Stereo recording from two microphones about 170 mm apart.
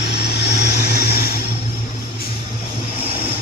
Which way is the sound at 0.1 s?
75° left (ahead or behind).